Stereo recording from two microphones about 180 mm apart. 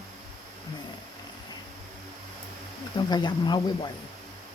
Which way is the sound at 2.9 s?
25° left (ahead or behind).